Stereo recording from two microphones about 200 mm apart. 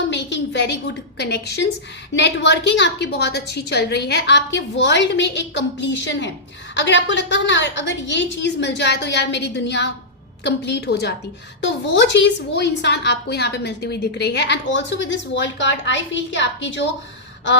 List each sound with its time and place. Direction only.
0.1 s a woman's voice: 65° left (ahead or behind)